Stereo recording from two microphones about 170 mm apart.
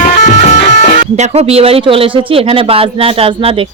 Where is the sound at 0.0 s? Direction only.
45° left (ahead or behind).